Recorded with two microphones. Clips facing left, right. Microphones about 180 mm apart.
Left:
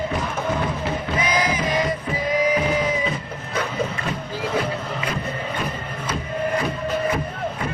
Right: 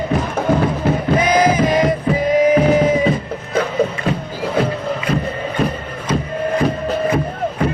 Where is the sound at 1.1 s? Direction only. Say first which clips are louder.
Right 9 dB; 45° right (ahead or behind).